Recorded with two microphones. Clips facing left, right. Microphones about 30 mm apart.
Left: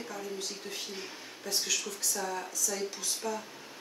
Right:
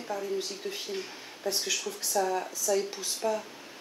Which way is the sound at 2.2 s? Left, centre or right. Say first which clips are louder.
Right 6 dB; centre.